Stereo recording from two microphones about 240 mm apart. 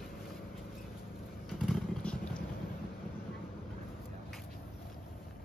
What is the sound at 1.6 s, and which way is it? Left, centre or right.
Vehicle, centre.